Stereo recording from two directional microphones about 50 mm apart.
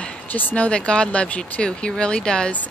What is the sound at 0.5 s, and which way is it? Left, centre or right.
Speech, left.